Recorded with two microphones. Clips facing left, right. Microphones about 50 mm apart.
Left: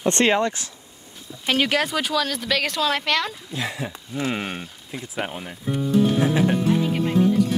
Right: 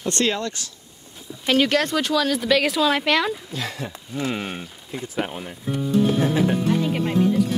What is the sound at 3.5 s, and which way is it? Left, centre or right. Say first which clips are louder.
Speech: left 1 dB; centre.